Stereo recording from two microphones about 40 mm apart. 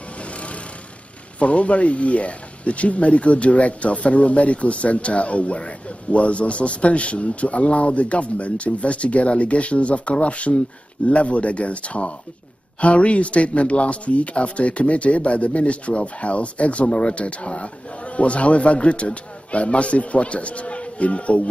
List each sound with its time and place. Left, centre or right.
0.2 s vehicle: left
1.4 s speech: left